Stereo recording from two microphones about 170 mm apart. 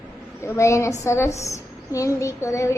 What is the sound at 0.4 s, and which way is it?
A woman's voice, 15° left (ahead or behind).